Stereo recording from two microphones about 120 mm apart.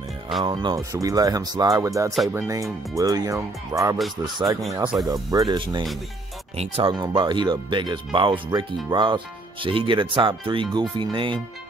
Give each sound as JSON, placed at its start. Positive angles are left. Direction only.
{"t": 0.4, "sound": "speech", "side_deg": -40}
{"t": 6.5, "sound": "speech", "side_deg": -60}
{"t": 6.9, "sound": "speech", "side_deg": -40}